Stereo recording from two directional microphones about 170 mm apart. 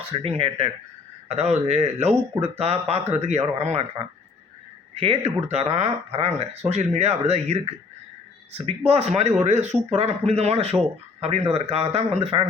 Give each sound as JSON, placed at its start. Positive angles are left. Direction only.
{"t": 0.0, "sound": "speech", "side_deg": -35}
{"t": 4.9, "sound": "speech", "side_deg": -35}
{"t": 8.9, "sound": "speech", "side_deg": -40}